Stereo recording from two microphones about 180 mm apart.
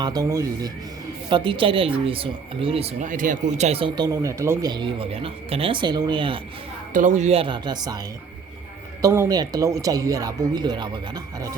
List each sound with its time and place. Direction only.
0.0 s speech: 20° right (ahead or behind)
6.9 s speech: 45° right (ahead or behind); by 7.9 s 25° right (ahead or behind)
9.0 s speech: 15° right (ahead or behind)